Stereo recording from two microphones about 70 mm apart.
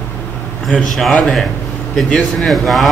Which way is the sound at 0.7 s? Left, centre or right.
Centre.